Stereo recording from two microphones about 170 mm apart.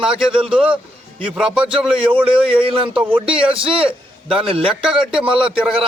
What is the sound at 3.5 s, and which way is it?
A man's voice, 30° right (ahead or behind).